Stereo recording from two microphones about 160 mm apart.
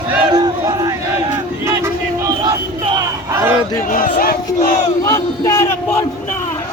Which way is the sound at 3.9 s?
65° left (ahead or behind).